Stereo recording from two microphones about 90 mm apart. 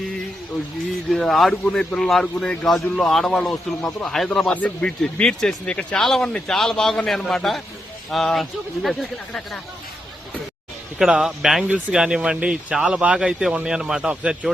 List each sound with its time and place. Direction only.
1.1 s a man's voice: centre (ahead or behind)
10.9 s speech: 5° right (ahead or behind)